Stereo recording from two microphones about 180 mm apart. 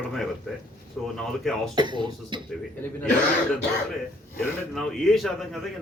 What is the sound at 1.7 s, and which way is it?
Speech, 25° right (ahead or behind).